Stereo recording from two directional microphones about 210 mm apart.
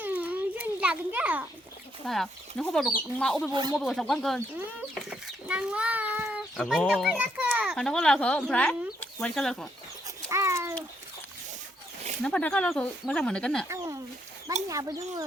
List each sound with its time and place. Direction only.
0.0 s a sound: 5° right (ahead or behind)
2.0 s speech: centre (ahead or behind)
3.5 s speech: 20° right (ahead or behind)
3.8 s speech: centre (ahead or behind)
10.2 s babbling: 15° right (ahead or behind)
12.2 s speech: 5° left (ahead or behind)
13.7 s a sound: 15° right (ahead or behind)
14.7 s speech: 15° right (ahead or behind)